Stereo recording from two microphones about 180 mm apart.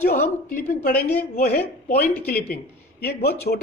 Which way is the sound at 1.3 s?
60° left (ahead or behind).